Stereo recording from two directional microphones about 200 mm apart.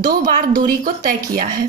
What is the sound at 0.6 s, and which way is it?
Speech, 45° right (ahead or behind).